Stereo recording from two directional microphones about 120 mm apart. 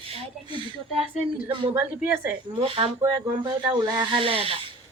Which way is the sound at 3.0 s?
30° right (ahead or behind).